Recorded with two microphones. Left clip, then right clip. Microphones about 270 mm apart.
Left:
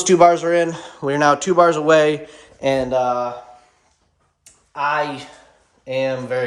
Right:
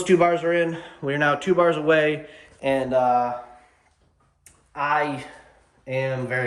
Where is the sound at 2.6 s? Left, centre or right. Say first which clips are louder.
Left 4 dB; left.